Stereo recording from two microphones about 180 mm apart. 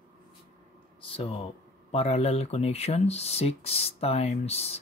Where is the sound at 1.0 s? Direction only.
30° left (ahead or behind).